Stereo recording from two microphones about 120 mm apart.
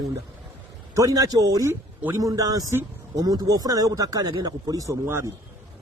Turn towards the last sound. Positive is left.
turn(degrees=-25)  # may be behind; listen again after turning